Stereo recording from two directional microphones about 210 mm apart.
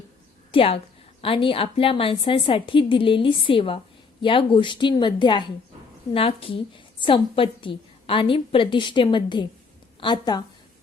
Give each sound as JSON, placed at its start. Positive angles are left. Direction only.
{"t": 0.5, "sound": "a woman's voice", "side_deg": 25}